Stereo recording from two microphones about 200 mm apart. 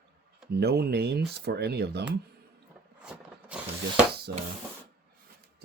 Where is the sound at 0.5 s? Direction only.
55° right (ahead or behind).